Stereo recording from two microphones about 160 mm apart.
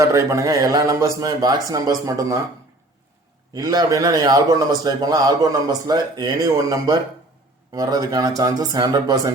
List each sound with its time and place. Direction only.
0.0 s a man's voice: 20° right (ahead or behind)
3.5 s a man's voice: 25° right (ahead or behind)